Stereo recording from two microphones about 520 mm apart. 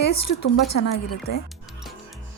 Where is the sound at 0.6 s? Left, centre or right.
Left.